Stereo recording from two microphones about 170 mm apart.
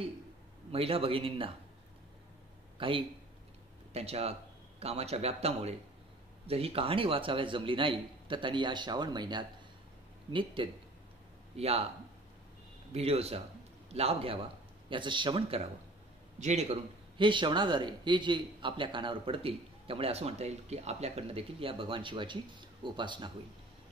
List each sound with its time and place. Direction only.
0.7 s speech: 35° right (ahead or behind)
2.8 s speech: 30° right (ahead or behind)
12.9 s a man's voice: 35° right (ahead or behind)
17.2 s speech: 30° right (ahead or behind)